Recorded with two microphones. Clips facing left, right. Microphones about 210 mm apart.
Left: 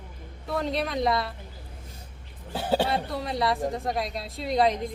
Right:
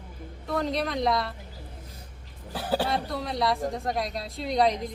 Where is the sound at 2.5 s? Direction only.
25° left (ahead or behind).